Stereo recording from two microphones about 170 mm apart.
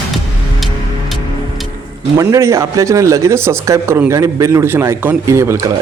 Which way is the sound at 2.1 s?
20° right (ahead or behind).